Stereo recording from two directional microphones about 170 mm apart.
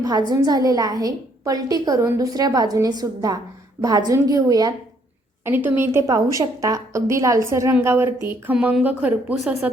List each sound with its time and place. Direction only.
0.3 s a woman's voice: 25° right (ahead or behind); by 9.6 s 5° right (ahead or behind)